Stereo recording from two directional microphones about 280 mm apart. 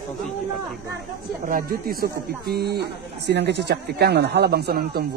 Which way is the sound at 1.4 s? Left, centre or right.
Right.